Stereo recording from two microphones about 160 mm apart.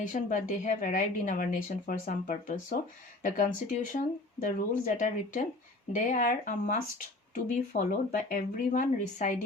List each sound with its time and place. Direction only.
0.0 s a woman's voice: 55° left (ahead or behind)